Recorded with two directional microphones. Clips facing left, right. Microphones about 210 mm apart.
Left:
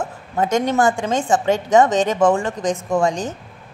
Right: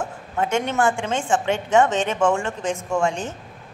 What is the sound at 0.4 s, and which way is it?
A woman's voice, 40° left (ahead or behind).